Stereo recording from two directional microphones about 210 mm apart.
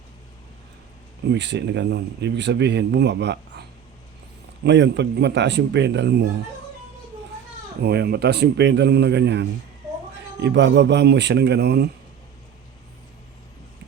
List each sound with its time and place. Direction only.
1.3 s speech: 55° right (ahead or behind)
4.6 s speech: 55° right (ahead or behind)
7.8 s speech: 50° right (ahead or behind)